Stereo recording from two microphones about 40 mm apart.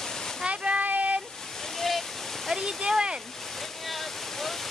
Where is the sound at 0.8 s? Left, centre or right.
Right.